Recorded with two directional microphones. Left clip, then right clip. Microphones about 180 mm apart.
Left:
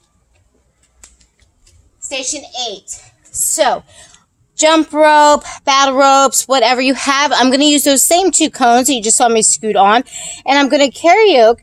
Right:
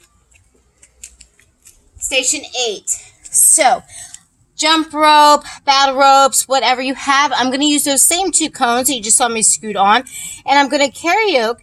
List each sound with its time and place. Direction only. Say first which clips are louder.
2.3 s a child's voice: right 3 dB; 10° right (ahead or behind)
4.5 s speech: left 4 dB; 65° left (ahead or behind)